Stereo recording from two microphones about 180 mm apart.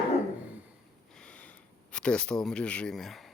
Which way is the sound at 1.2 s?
5° left (ahead or behind).